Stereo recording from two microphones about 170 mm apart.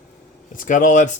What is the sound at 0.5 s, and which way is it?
Speech, 50° left (ahead or behind).